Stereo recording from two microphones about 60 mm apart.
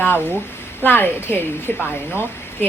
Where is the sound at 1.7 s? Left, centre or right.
Left.